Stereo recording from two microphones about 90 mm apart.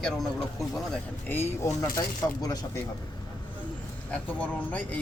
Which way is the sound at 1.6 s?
40° left (ahead or behind).